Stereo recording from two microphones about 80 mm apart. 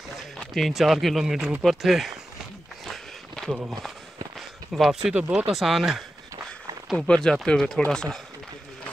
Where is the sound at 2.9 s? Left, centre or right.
Centre.